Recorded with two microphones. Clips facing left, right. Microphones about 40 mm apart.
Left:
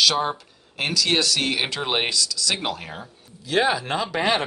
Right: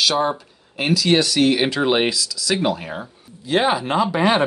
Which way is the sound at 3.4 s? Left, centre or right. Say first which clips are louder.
Right 3 dB; right.